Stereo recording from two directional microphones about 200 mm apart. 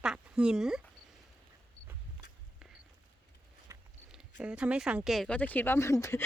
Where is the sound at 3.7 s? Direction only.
15° right (ahead or behind).